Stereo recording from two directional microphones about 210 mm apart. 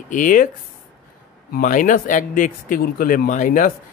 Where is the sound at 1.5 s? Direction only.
40° left (ahead or behind).